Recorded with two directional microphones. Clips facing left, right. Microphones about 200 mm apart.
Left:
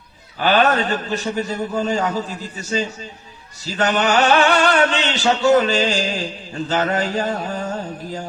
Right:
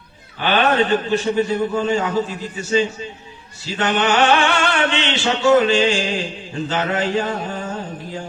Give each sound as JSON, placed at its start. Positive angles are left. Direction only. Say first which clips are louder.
{"t": 0.4, "sound": "a man's voice", "louder": "even", "side_deg": 40}
{"t": 3.7, "sound": "music", "louder": "even", "side_deg": 40}